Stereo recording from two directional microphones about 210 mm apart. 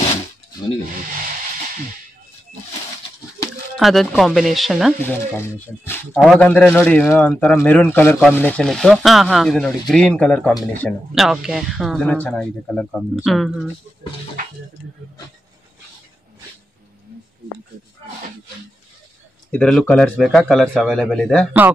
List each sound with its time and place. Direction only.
3.4 s a sound: 15° left (ahead or behind)
3.7 s speech: centre (ahead or behind)
6.1 s a man's voice: centre (ahead or behind)
19.5 s speech: 5° left (ahead or behind)